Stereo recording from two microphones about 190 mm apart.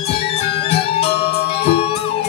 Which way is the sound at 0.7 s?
30° left (ahead or behind).